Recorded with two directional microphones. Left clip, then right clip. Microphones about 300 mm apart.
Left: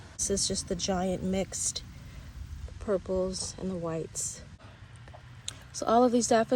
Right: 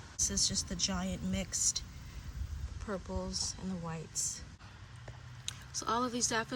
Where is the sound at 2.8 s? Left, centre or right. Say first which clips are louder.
Left 11 dB; centre.